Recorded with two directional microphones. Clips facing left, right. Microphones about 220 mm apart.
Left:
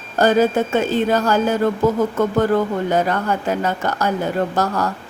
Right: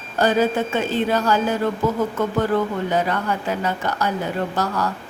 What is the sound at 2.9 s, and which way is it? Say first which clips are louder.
A woman's voice: left 3 dB; 45° left (ahead or behind).